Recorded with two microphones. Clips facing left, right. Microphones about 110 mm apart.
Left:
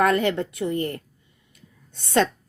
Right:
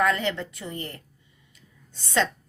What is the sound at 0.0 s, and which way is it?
A woman's voice, 50° left (ahead or behind).